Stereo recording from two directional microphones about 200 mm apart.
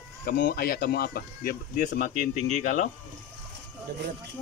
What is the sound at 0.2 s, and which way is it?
Speech, 45° left (ahead or behind).